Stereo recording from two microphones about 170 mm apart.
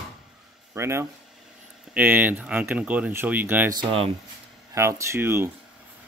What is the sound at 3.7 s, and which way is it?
Speech, 30° right (ahead or behind).